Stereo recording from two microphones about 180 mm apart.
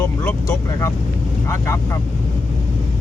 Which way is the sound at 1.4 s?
15° left (ahead or behind).